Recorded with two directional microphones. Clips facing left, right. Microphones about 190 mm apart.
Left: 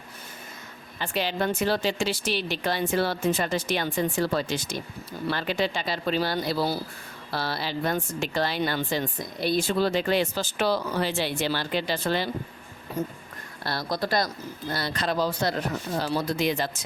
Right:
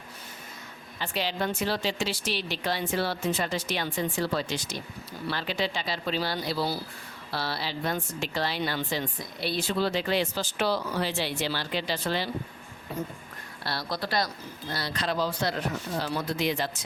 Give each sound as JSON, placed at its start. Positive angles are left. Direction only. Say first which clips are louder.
{"t": 0.9, "sound": "speech", "louder": "left 3 dB", "side_deg": 50}
{"t": 13.7, "sound": "speech", "louder": "left 4 dB", "side_deg": 45}